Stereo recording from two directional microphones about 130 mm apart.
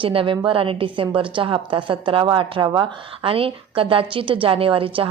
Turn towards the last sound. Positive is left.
turn(degrees=-45)  # may be behind; listen again after turning